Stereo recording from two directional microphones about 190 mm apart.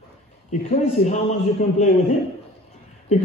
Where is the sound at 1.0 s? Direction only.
35° left (ahead or behind).